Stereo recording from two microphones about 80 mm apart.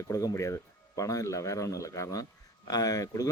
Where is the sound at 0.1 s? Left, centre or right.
Left.